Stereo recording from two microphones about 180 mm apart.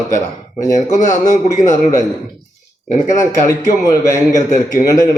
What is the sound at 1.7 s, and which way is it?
Speech, 20° left (ahead or behind).